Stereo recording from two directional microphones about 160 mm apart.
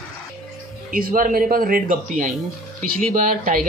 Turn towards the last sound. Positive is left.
turn(degrees=-60)  # may be behind; listen again after turning